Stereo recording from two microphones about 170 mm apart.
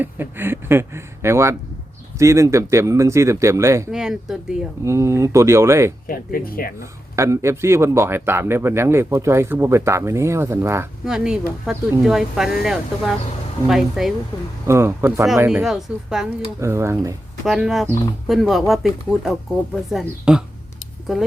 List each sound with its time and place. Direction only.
0.0 s speech: 10° right (ahead or behind)
3.9 s speech: 5° right (ahead or behind)
4.9 s speech: 15° right (ahead or behind)
6.1 s speech: 60° left (ahead or behind)
7.2 s speech: 15° right (ahead or behind)
11.0 s speech: 5° right (ahead or behind)
14.7 s speech: 15° right (ahead or behind)
16.6 s speech: 15° right (ahead or behind)
17.4 s speech: centre (ahead or behind)